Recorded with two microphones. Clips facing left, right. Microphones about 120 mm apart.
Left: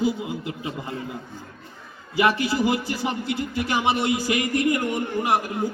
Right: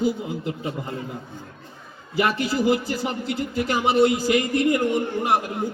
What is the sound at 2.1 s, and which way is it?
Speech, centre (ahead or behind).